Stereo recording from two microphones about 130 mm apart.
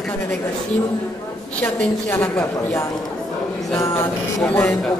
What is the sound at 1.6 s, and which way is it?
A woman's voice, 15° left (ahead or behind).